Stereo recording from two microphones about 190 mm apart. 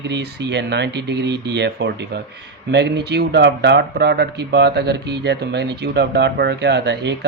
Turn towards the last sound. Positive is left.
turn(degrees=-65)  # may be behind; listen again after turning